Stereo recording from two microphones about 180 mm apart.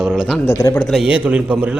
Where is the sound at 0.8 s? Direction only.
Centre (ahead or behind).